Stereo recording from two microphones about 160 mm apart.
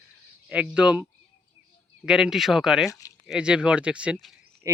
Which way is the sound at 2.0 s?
5° right (ahead or behind).